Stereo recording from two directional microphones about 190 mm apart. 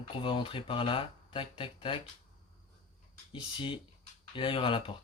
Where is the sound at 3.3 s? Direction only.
25° left (ahead or behind).